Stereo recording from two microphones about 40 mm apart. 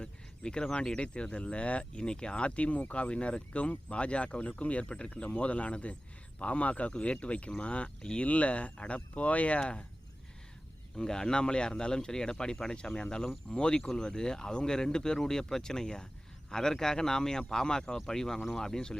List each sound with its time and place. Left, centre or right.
0.0 s speech: left
10.9 s speech: centre